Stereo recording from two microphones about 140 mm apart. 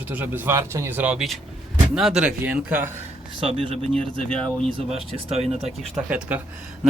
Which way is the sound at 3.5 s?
45° right (ahead or behind).